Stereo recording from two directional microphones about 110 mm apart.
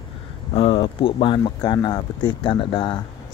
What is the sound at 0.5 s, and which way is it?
Speech, 55° left (ahead or behind).